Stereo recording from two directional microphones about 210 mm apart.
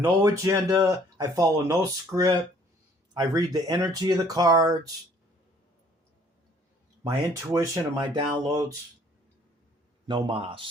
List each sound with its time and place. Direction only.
0.0 s speech: 15° right (ahead or behind)
7.5 s speech: 15° right (ahead or behind)
10.1 s a man's voice: 20° right (ahead or behind)